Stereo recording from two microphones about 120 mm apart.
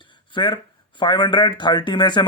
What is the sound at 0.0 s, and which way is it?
Speech, 40° left (ahead or behind).